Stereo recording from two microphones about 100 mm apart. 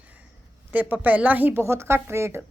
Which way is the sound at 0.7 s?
15° right (ahead or behind).